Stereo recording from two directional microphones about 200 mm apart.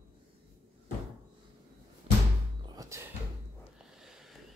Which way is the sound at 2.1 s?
30° right (ahead or behind).